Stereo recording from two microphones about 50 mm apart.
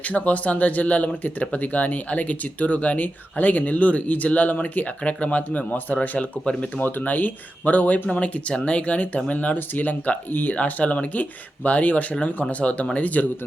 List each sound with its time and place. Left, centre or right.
0.0 s speech: left
6.7 s speech: left